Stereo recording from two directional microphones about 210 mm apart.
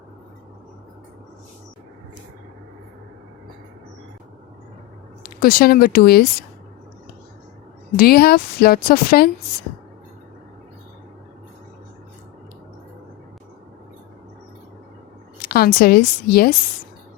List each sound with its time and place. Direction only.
5.2 s speech: 45° left (ahead or behind)
7.9 s a woman's voice: 45° left (ahead or behind)
15.4 s a woman's voice: 45° left (ahead or behind)